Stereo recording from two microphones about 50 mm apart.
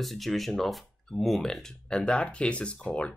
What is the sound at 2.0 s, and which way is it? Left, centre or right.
Speech, left.